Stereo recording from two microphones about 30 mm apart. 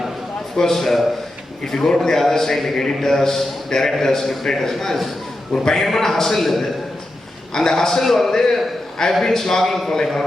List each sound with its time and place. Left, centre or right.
0.5 s a man's voice: centre
0.8 s a man's voice: centre
7.5 s a man's voice: left